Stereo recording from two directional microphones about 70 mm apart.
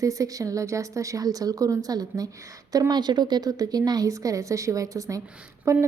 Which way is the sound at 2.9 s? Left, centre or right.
Right.